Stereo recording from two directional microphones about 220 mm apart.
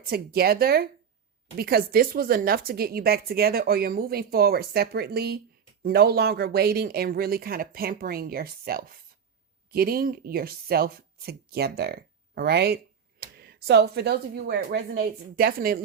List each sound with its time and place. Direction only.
0.0 s speech: 45° right (ahead or behind)